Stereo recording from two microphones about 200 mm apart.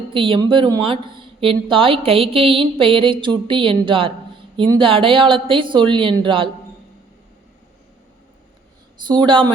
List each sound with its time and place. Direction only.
0.1 s a woman's voice: 25° right (ahead or behind)
9.0 s a woman's voice: 25° right (ahead or behind)